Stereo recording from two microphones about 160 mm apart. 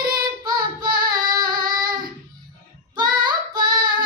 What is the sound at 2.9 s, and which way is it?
Child singing, 25° right (ahead or behind).